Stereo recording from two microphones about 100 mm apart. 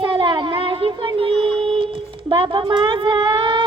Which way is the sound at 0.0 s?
55° right (ahead or behind).